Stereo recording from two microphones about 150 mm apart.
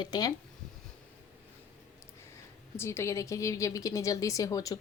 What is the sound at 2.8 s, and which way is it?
A woman's voice, 15° left (ahead or behind).